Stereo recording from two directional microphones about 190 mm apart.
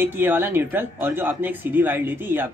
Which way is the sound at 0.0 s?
10° right (ahead or behind).